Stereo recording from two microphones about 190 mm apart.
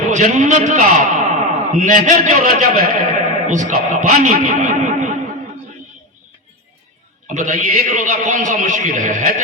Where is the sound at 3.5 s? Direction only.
40° right (ahead or behind).